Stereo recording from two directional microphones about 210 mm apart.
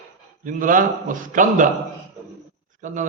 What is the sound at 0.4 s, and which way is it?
A man's voice, 40° right (ahead or behind).